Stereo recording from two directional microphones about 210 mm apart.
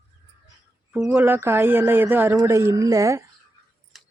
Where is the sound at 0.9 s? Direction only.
5° right (ahead or behind).